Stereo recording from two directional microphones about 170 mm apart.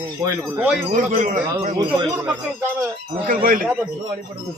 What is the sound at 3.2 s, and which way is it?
Speech, 55° right (ahead or behind).